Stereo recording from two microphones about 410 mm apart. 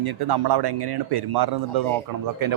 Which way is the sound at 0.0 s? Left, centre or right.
Right.